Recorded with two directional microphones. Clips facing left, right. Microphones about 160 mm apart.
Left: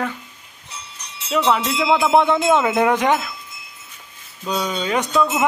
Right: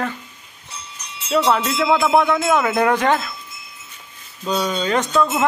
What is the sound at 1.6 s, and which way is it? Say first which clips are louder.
Speech: even; 10° left (ahead or behind).